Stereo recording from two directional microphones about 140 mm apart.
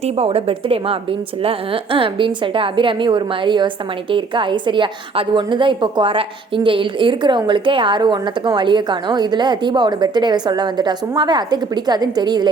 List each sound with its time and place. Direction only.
0.0 s a woman's voice: 45° right (ahead or behind)